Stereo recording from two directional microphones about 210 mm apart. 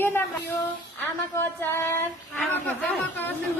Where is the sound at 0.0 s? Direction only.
10° left (ahead or behind).